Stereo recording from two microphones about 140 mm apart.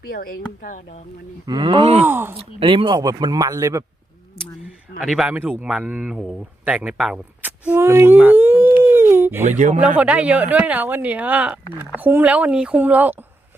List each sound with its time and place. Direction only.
0.1 s speech: 90° left
1.5 s speech: 30° right (ahead or behind)
2.0 s a woman's voice: 15° right (ahead or behind)
2.3 s speech: 40° right (ahead or behind); by 3.8 s 25° right (ahead or behind)
4.6 s a sound: 5° right (ahead or behind)
5.4 s speech: 10° right (ahead or behind)
8.8 s a sound: 20° right (ahead or behind)
9.4 s speech: 60° right (ahead or behind)
10.0 s a woman's voice: 10° right (ahead or behind)